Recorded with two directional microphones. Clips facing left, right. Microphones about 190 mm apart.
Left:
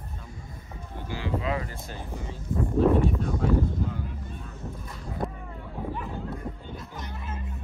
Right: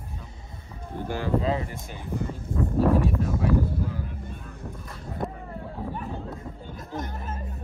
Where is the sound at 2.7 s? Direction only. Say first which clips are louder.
Left 1 dB; centre (ahead or behind).